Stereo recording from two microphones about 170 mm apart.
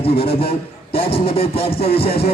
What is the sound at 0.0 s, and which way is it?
A man's voice, 35° left (ahead or behind).